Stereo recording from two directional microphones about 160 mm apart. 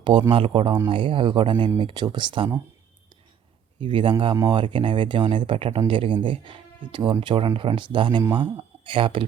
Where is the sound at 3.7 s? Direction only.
30° right (ahead or behind).